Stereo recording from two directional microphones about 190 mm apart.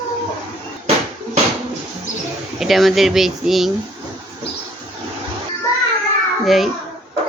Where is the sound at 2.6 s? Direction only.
Centre (ahead or behind).